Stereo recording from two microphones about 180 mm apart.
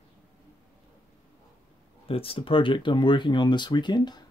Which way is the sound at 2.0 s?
30° left (ahead or behind).